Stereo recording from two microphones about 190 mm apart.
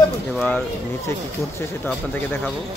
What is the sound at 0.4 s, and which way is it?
Speech, 10° left (ahead or behind).